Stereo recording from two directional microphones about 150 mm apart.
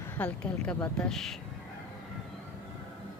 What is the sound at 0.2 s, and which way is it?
A woman's voice, 5° left (ahead or behind).